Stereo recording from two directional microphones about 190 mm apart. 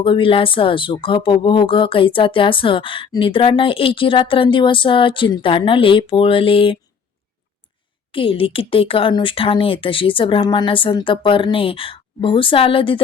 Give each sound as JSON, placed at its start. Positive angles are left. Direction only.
{"t": 0.0, "sound": "speech", "side_deg": 25}
{"t": 8.1, "sound": "speech", "side_deg": 30}